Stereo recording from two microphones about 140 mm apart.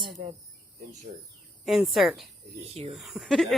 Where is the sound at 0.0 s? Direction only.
45° right (ahead or behind).